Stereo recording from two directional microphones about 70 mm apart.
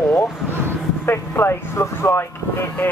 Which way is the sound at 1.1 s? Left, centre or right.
Left.